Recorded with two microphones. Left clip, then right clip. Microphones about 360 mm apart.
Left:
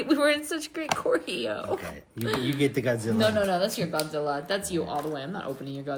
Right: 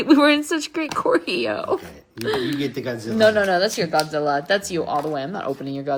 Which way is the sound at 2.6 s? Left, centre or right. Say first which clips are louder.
Left 1 dB; centre.